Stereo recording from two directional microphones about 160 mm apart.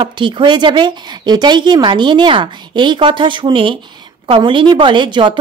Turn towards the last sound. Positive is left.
turn(degrees=-30)  # may be behind; listen again after turning